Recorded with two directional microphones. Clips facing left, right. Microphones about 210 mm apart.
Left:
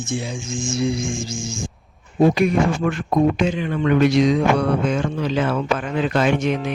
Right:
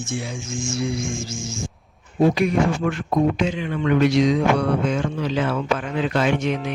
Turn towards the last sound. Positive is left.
turn(degrees=50)  # may be behind; listen again after turning